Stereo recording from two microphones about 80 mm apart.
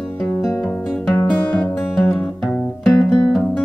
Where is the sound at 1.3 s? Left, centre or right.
Centre.